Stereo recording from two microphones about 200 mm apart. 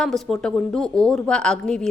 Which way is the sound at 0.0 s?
Centre (ahead or behind).